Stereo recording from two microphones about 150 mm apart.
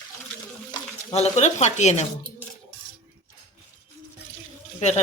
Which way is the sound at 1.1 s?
50° left (ahead or behind).